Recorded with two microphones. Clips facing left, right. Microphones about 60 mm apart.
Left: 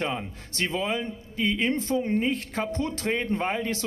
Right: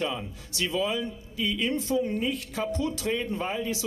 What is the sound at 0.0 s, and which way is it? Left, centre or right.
A man's voice, left.